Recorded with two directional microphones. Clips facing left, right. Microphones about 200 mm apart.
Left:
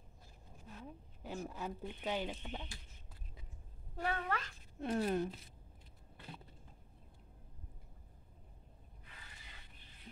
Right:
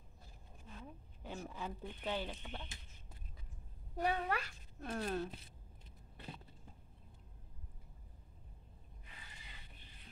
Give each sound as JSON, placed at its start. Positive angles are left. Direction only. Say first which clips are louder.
{"t": 0.7, "sound": "a sound", "louder": "left 2 dB", "side_deg": 5}
{"t": 3.9, "sound": "speech", "louder": "right 2 dB", "side_deg": -15}
{"t": 4.7, "sound": "speech", "louder": "left 5 dB", "side_deg": 20}